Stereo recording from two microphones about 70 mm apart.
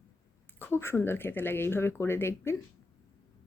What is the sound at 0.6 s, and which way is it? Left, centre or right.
Speech, left.